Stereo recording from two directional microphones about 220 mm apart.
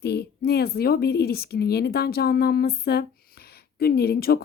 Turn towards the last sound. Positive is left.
turn(degrees=45)  # may be behind; listen again after turning